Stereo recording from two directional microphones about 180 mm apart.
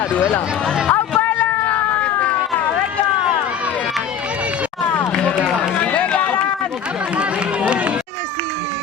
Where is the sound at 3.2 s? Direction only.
5° right (ahead or behind).